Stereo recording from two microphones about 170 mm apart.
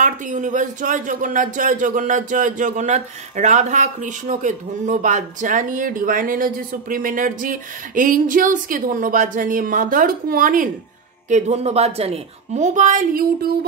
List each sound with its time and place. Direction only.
0.0 s speech: 50° right (ahead or behind)
11.2 s speech: 45° right (ahead or behind); by 13.5 s 60° right (ahead or behind)